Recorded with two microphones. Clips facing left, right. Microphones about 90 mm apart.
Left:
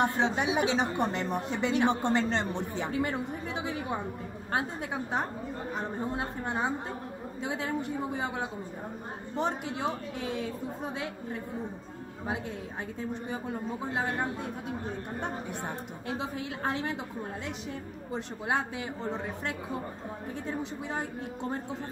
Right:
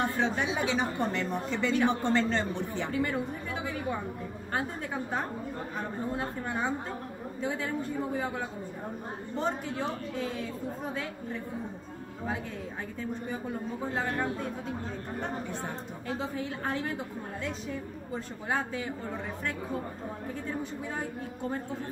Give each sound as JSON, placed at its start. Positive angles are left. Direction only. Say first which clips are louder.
{"t": 0.0, "sound": "a woman's voice", "louder": "left 2 dB", "side_deg": 20}
{"t": 13.9, "sound": "a woman's voice", "louder": "even", "side_deg": 20}
{"t": 18.1, "sound": "a woman's voice", "louder": "left 2 dB", "side_deg": 20}